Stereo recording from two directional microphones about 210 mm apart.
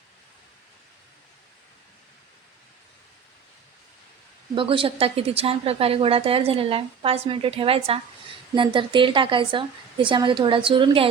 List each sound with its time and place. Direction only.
4.5 s a woman's voice: 25° right (ahead or behind)